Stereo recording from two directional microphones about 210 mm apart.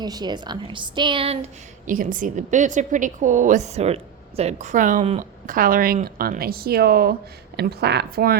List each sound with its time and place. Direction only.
0.0 s a woman's voice: 20° right (ahead or behind)
1.9 s a woman's voice: 40° right (ahead or behind)